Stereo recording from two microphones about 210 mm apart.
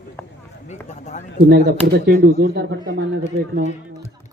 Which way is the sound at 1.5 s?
55° right (ahead or behind).